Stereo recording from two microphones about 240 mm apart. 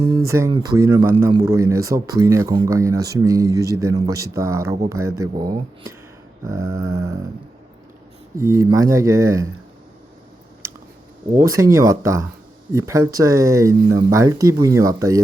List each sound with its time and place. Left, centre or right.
0.3 s speech: centre
6.6 s a sound: right
6.9 s speech: centre
8.4 s speech: centre
11.3 s speech: centre